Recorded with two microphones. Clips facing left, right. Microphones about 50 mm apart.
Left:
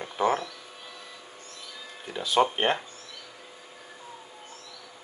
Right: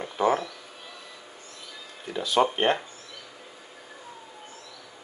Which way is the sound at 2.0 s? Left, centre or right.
Centre.